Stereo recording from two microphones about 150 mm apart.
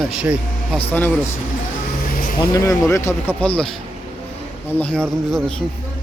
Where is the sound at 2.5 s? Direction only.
20° left (ahead or behind); by 5.6 s 5° left (ahead or behind).